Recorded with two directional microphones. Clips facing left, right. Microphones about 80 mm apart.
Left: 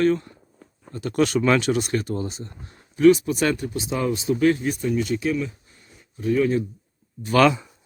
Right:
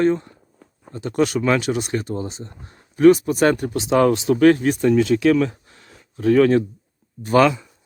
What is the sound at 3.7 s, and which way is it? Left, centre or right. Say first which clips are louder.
Speech: right 8 dB; right.